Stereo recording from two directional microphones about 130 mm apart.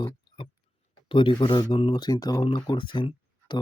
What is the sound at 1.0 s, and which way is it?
Speech, 40° left (ahead or behind).